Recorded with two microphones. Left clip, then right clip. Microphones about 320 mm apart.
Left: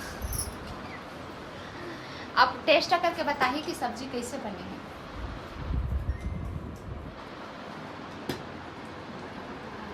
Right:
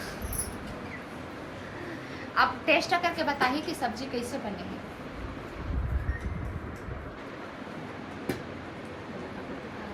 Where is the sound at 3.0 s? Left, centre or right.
Centre.